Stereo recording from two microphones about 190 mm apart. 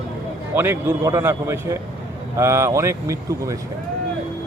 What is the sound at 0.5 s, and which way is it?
Speech, 10° right (ahead or behind).